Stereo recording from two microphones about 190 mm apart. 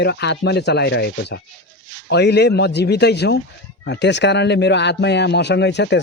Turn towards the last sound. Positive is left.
turn(degrees=65)  # may be behind; listen again after turning